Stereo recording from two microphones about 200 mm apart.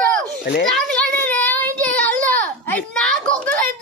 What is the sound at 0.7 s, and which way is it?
Child singing, 5° left (ahead or behind).